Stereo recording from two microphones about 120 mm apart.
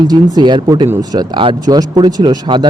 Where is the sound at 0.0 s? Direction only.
35° right (ahead or behind).